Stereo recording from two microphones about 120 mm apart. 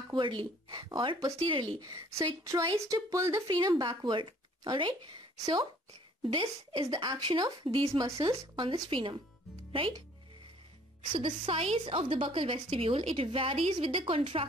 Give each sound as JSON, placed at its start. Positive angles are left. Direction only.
{"t": 0.1, "sound": "a woman's voice", "side_deg": -45}
{"t": 3.4, "sound": "speech", "side_deg": -40}
{"t": 6.9, "sound": "speech", "side_deg": -35}
{"t": 8.3, "sound": "a woman's voice", "side_deg": -40}
{"t": 11.1, "sound": "a woman's voice", "side_deg": -45}